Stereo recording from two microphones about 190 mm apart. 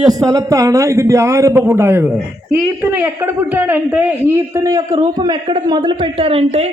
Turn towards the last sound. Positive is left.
turn(degrees=-30)  # may be behind; listen again after turning